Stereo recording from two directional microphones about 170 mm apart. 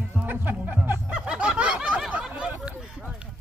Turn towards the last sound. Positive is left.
turn(degrees=-5)  # may be behind; listen again after turning